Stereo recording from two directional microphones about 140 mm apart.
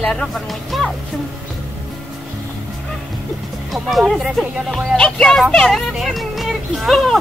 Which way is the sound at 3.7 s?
Centre (ahead or behind).